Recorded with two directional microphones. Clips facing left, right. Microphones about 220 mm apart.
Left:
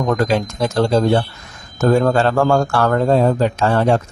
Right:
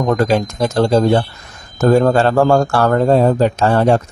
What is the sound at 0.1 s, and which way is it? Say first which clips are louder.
Speech: right 3 dB; 40° right (ahead or behind).